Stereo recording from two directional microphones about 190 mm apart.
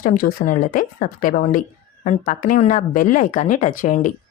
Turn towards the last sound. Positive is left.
turn(degrees=40)  # may be behind; listen again after turning